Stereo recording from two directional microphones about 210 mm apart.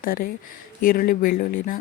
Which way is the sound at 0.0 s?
45° left (ahead or behind).